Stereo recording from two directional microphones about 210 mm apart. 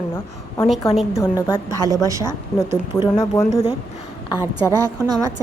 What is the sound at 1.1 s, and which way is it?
Speech, 15° left (ahead or behind).